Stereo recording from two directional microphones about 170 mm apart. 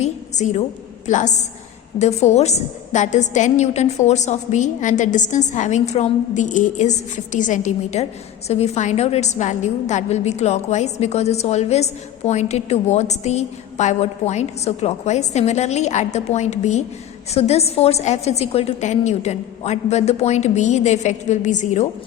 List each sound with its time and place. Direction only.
0.0 s a woman's voice: 40° left (ahead or behind)